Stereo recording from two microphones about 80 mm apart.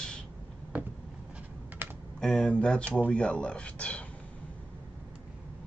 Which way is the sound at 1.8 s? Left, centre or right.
Right.